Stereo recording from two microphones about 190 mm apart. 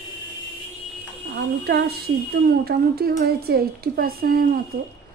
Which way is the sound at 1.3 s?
60° right (ahead or behind).